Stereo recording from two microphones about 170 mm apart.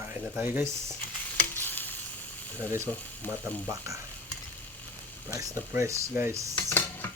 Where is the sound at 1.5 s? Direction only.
10° left (ahead or behind).